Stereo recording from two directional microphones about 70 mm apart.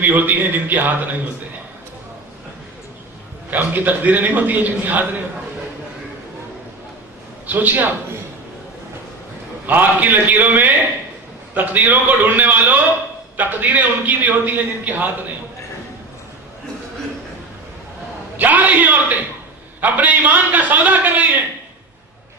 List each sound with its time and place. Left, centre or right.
0.0 s a man's voice: right
3.5 s a man's voice: right
7.4 s a man's voice: right
9.6 s a man's voice: right
18.3 s a man's voice: right